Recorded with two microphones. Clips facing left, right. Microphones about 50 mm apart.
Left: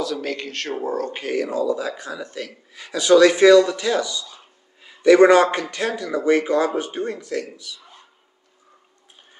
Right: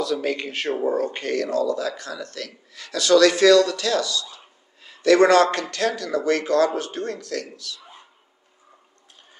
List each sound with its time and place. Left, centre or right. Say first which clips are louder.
0.0 s speech: right 2 dB; centre
1.2 s a man's voice: left 3 dB; centre